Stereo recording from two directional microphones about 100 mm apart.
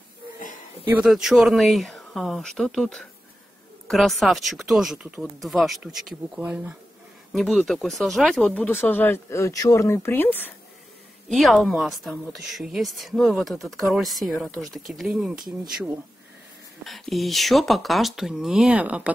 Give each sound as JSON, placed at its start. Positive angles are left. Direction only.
{"t": 1.0, "sound": "a woman's voice", "side_deg": -5}
{"t": 7.3, "sound": "a woman's voice", "side_deg": 0}
{"t": 8.5, "sound": "speech", "side_deg": 15}
{"t": 9.3, "sound": "speech", "side_deg": 35}
{"t": 11.2, "sound": "a woman's voice", "side_deg": 0}
{"t": 16.8, "sound": "a woman's voice", "side_deg": 0}